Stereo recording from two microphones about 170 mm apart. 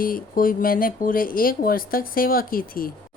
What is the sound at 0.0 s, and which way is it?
Speech, 55° left (ahead or behind).